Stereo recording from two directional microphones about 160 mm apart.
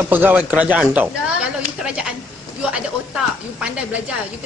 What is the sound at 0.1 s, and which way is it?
Speech, 10° right (ahead or behind).